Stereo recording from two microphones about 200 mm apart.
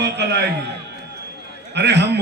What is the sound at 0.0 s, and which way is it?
Speech, 60° right (ahead or behind).